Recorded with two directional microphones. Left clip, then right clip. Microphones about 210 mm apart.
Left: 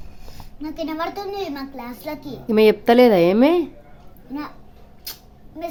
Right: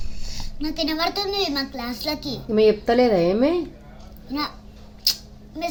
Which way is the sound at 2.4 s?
30° left (ahead or behind).